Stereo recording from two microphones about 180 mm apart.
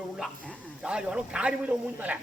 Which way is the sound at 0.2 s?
5° right (ahead or behind).